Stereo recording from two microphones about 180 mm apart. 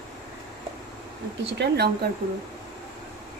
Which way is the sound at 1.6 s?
65° right (ahead or behind).